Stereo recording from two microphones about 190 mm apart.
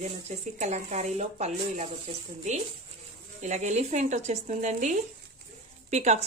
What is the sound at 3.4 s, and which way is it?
Speech, 40° right (ahead or behind).